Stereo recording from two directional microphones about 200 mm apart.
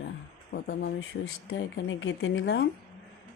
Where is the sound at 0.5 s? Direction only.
55° left (ahead or behind).